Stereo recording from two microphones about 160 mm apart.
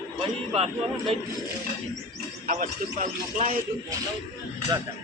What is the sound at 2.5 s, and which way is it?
Speech, 55° right (ahead or behind).